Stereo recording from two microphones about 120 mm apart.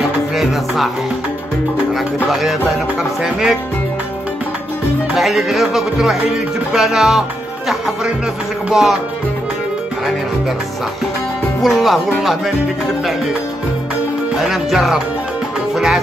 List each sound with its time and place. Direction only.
2.2 s speech: centre (ahead or behind)
5.1 s speech: centre (ahead or behind)
6.7 s music: centre (ahead or behind)
8.6 s speech: centre (ahead or behind)
11.6 s speech: centre (ahead or behind)
14.3 s speech: centre (ahead or behind)
15.7 s music: 5° right (ahead or behind)